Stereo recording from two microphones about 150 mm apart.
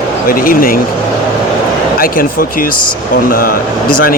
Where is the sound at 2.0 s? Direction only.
70° left (ahead or behind).